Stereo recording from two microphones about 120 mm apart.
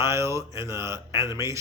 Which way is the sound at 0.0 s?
25° right (ahead or behind).